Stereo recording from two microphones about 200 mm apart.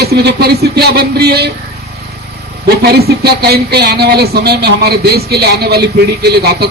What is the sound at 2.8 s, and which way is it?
Speech, 50° right (ahead or behind).